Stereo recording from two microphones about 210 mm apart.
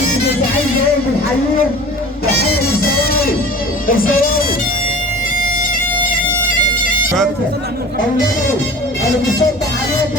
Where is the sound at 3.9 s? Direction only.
40° left (ahead or behind).